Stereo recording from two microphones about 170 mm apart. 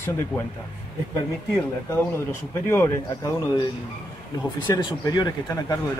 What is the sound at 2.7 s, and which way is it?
Speech, 15° left (ahead or behind).